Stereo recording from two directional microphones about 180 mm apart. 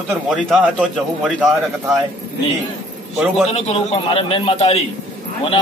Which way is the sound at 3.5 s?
35° left (ahead or behind).